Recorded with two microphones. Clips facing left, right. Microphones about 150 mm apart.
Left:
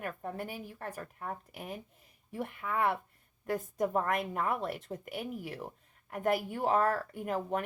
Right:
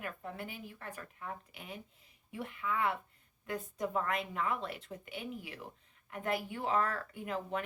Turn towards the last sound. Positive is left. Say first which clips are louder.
# left 4 dB
turn(degrees=45)  # may be behind; listen again after turning